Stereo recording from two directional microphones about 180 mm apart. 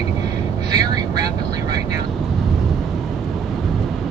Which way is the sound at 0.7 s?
20° right (ahead or behind).